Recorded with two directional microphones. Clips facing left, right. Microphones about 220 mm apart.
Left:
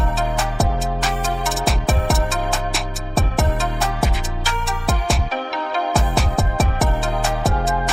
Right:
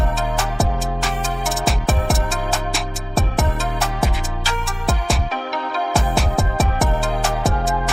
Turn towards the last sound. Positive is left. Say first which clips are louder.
# even
turn(degrees=0)  # may be behind; listen again after turning